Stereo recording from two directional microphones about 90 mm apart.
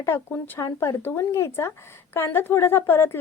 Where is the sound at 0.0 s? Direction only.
25° left (ahead or behind).